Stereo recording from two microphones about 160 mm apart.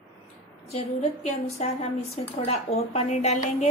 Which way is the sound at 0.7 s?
45° left (ahead or behind).